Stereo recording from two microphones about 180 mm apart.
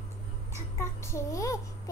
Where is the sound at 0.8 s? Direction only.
15° left (ahead or behind).